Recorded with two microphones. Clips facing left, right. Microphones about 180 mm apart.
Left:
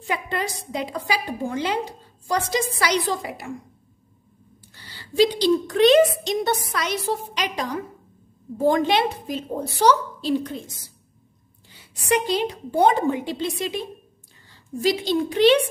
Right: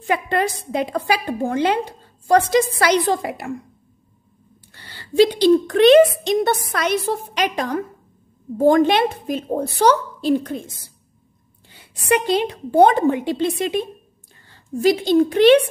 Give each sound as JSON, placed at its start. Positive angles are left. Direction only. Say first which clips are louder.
{"t": 0.0, "sound": "a woman's voice", "louder": "right 6 dB", "side_deg": -60}
{"t": 4.7, "sound": "a woman's voice", "louder": "right 4 dB", "side_deg": -60}
{"t": 11.7, "sound": "a woman's voice", "louder": "right 3 dB", "side_deg": -60}